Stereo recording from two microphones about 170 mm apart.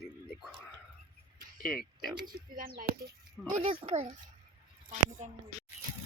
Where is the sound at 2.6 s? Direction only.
60° right (ahead or behind).